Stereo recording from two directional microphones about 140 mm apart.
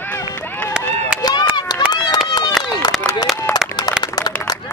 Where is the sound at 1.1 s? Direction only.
30° left (ahead or behind).